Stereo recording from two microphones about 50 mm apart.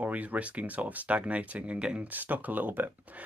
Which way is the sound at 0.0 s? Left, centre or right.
Right.